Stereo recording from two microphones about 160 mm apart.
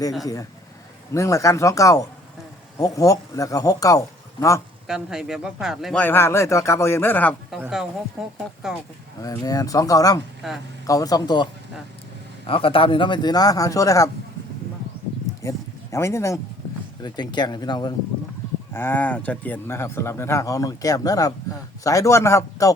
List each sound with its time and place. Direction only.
1.1 s a man's voice: 20° left (ahead or behind)
4.9 s speech: 5° right (ahead or behind)
6.0 s speech: 15° left (ahead or behind)
7.5 s speech: 5° right (ahead or behind)
9.2 s a man's voice: 20° left (ahead or behind)
10.4 s speech: centre (ahead or behind)
10.8 s a man's voice: 20° left (ahead or behind)
12.5 s a man's voice: 35° left (ahead or behind)
15.4 s a man's voice: 15° left (ahead or behind)
18.7 s a man's voice: 15° left (ahead or behind)